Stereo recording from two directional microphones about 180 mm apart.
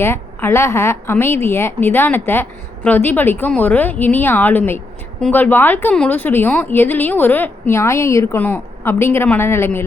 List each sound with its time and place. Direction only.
0.0 s a woman's voice: 10° left (ahead or behind)